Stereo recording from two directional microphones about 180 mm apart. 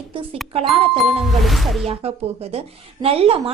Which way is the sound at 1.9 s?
35° right (ahead or behind).